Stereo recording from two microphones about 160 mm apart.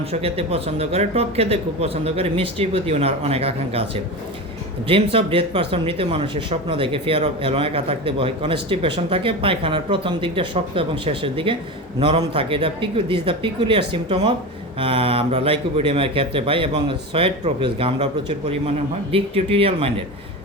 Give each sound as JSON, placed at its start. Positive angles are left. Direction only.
{"t": 0.1, "sound": "speech", "side_deg": -40}
{"t": 5.1, "sound": "speech", "side_deg": -35}